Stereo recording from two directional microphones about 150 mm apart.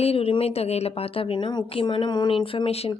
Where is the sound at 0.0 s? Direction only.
40° left (ahead or behind).